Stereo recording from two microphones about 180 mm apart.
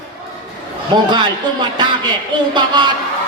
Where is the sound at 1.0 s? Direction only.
25° right (ahead or behind).